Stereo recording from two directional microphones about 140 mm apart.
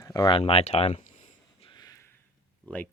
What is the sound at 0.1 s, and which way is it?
Speech, 35° left (ahead or behind).